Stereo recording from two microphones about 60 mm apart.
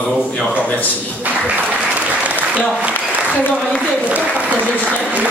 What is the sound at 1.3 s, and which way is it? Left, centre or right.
Speech, right.